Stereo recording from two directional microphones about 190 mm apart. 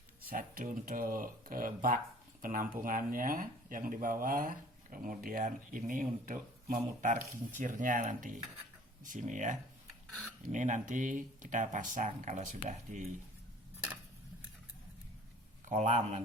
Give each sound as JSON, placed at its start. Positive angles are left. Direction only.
{"t": 0.2, "sound": "speech", "side_deg": -50}
{"t": 15.7, "sound": "speech", "side_deg": -40}